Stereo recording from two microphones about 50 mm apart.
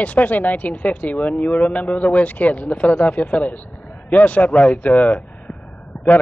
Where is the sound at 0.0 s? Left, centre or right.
Left.